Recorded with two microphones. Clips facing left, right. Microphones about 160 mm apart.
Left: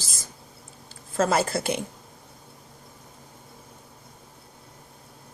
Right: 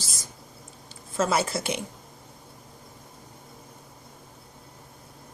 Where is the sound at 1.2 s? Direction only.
55° left (ahead or behind).